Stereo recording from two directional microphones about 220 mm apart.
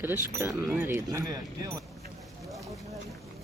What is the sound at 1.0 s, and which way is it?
Speech, 15° right (ahead or behind).